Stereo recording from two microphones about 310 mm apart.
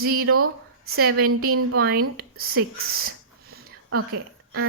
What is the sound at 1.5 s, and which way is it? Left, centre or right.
Speech, right.